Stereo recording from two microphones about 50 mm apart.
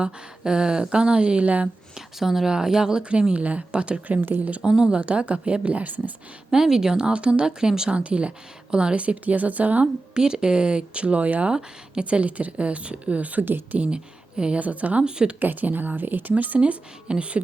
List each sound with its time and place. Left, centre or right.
0.0 s speech: centre
1.6 s a woman's voice: centre; by 6.1 s right
6.5 s a woman's voice: centre; by 9.8 s right
9.8 s speech: centre; by 13.7 s right
13.7 s speech: right
15.0 s speech: centre
15.4 s a woman's voice: right
16.6 s speech: right